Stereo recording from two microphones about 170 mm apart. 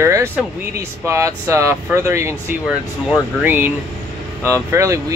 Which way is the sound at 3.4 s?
10° right (ahead or behind).